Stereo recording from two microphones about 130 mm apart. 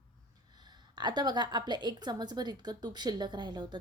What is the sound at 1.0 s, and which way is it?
A woman's voice, 35° right (ahead or behind).